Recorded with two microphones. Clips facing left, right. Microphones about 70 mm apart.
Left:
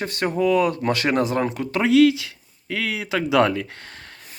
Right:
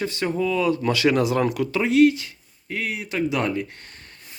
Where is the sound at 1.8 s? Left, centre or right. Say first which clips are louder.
Left 2 dB; left.